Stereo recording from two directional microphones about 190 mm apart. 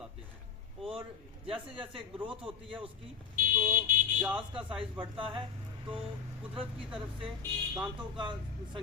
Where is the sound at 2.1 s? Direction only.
30° right (ahead or behind).